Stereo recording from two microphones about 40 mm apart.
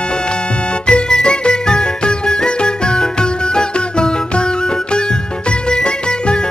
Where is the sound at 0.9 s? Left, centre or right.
Left.